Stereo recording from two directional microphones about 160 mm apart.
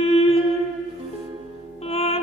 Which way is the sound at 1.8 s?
40° left (ahead or behind).